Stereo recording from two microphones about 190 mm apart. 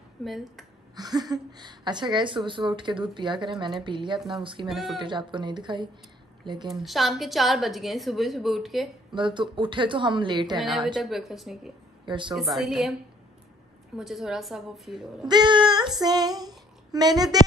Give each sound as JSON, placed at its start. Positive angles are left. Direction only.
{"t": 0.2, "sound": "a woman's voice", "side_deg": 0}
{"t": 0.9, "sound": "speech", "side_deg": -20}
{"t": 4.6, "sound": "a woman's voice", "side_deg": 0}
{"t": 4.9, "sound": "a woman's voice", "side_deg": -25}
{"t": 6.7, "sound": "a woman's voice", "side_deg": 0}
{"t": 9.1, "sound": "speech", "side_deg": -25}
{"t": 10.6, "sound": "a woman's voice", "side_deg": 0}
{"t": 12.1, "sound": "speech", "side_deg": -25}
{"t": 12.4, "sound": "a woman's voice", "side_deg": 0}
{"t": 13.9, "sound": "a woman's voice", "side_deg": 0}
{"t": 15.2, "sound": "speech", "side_deg": -25}